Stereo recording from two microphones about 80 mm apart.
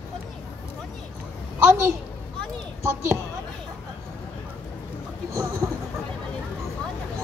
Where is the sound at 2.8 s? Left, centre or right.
Right.